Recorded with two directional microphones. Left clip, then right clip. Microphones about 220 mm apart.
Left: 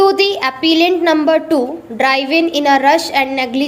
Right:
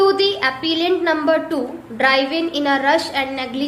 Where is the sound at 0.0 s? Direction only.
30° left (ahead or behind).